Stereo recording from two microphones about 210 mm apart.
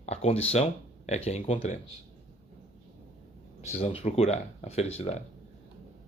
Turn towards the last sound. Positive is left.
turn(degrees=30)  # may be behind; listen again after turning